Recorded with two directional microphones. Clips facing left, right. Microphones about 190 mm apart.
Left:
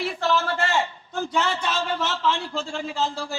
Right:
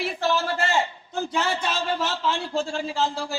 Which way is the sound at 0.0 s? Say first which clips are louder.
Left 1 dB; 20° right (ahead or behind).